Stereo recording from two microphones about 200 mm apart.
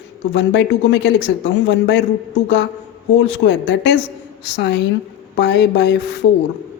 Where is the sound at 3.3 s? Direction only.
60° left (ahead or behind).